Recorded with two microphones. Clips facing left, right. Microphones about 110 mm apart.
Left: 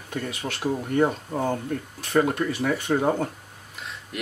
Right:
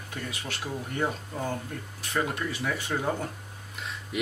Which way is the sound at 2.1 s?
45° left (ahead or behind).